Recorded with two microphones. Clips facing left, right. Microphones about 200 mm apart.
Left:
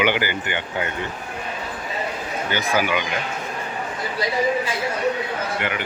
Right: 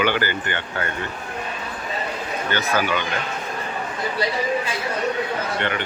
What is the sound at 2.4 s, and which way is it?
Speech, 10° left (ahead or behind).